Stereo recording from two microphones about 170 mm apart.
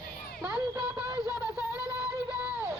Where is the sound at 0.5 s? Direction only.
15° right (ahead or behind).